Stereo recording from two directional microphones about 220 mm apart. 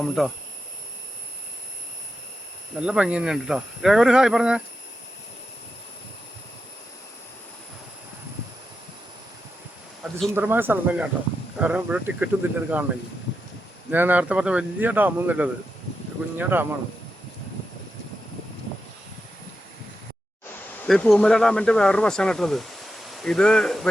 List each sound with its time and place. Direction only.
0.2 s speech: centre (ahead or behind)
2.7 s speech: 5° right (ahead or behind)
10.0 s speech: 5° right (ahead or behind)
13.9 s speech: 10° right (ahead or behind)
20.8 s speech: centre (ahead or behind)